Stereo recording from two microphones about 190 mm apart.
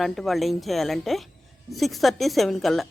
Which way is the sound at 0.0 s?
Centre (ahead or behind).